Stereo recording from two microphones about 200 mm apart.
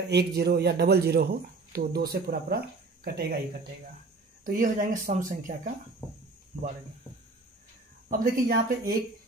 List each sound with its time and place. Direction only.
0.1 s speech: 55° right (ahead or behind)
4.5 s speech: 40° right (ahead or behind)
8.1 s speech: 45° right (ahead or behind)